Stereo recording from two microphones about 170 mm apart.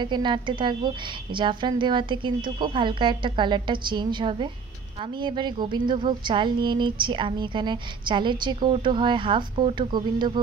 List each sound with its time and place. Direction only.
0.0 s speech: 25° right (ahead or behind)